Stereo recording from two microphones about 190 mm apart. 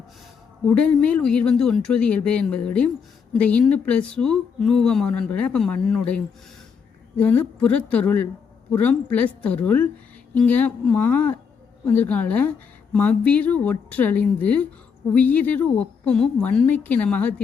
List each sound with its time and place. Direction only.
0.7 s a woman's voice: 5° left (ahead or behind)